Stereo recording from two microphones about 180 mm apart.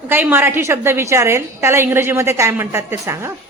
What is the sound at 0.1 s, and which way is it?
A woman's voice, 10° right (ahead or behind).